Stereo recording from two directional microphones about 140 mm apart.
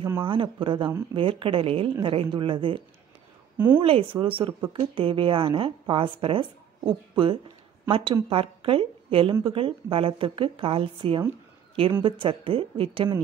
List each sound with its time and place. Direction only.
0.2 s speech: 40° right (ahead or behind)
3.5 s a woman's voice: 15° right (ahead or behind)
3.8 s speech: 40° right (ahead or behind)